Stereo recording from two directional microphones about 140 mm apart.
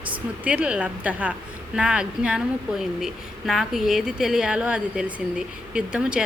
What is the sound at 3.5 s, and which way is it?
A woman's voice, centre (ahead or behind).